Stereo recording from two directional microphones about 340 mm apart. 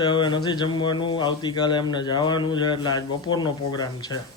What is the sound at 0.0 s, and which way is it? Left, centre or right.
Speech, centre.